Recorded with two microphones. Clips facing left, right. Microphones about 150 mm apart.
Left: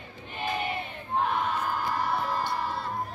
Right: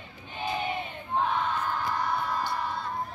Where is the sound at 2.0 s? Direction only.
5° left (ahead or behind).